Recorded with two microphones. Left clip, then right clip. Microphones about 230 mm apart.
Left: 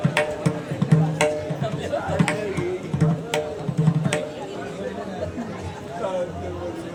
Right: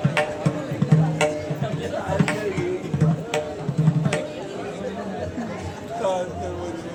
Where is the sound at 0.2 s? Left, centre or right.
Left.